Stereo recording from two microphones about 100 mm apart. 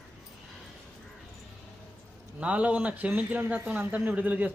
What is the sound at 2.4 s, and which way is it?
Speech, 15° right (ahead or behind).